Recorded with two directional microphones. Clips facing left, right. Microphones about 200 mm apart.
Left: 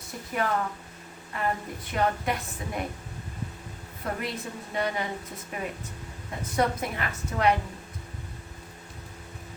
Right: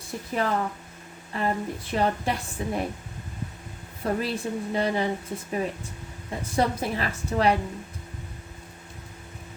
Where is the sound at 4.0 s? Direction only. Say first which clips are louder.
Right 6 dB; 30° right (ahead or behind).